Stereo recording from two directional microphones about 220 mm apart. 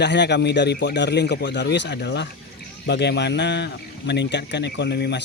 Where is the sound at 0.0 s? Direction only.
50° left (ahead or behind).